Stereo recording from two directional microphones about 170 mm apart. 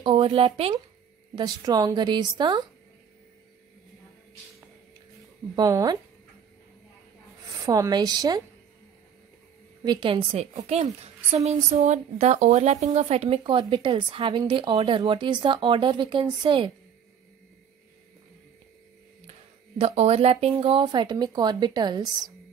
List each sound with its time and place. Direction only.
0.0 s speech: 30° right (ahead or behind)
1.3 s speech: 25° right (ahead or behind)
5.6 s speech: 20° right (ahead or behind)
7.6 s speech: 20° right (ahead or behind)
9.8 s speech: 30° right (ahead or behind)
19.8 s speech: 40° right (ahead or behind)